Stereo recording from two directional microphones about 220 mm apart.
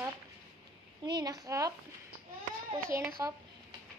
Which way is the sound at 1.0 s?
15° right (ahead or behind).